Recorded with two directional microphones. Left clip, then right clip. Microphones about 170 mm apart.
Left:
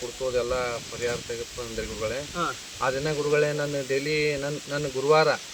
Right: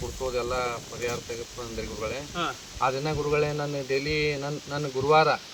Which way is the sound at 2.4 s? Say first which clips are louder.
Right 2 dB; 10° right (ahead or behind).